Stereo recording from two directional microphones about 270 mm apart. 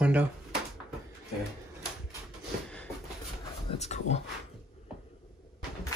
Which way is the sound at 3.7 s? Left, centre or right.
Left.